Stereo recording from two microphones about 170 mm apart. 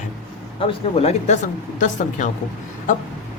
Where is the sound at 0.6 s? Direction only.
35° left (ahead or behind).